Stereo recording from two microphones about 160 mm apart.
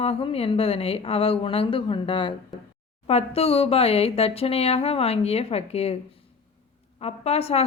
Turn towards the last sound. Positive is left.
turn(degrees=40)  # may be behind; listen again after turning